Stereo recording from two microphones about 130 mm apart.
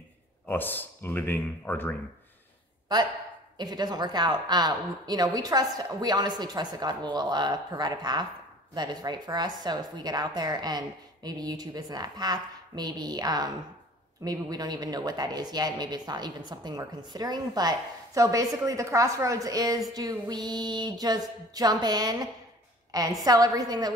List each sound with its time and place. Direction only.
0.5 s speech: 15° left (ahead or behind)
3.5 s a woman's voice: 30° right (ahead or behind)